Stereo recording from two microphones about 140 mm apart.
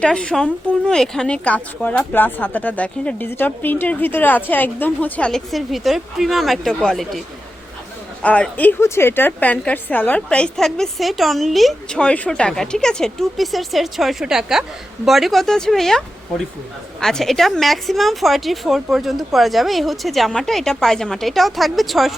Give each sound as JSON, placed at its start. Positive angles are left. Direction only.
{"t": 0.0, "sound": "a woman's voice", "side_deg": 5}
{"t": 8.2, "sound": "a woman's voice", "side_deg": 10}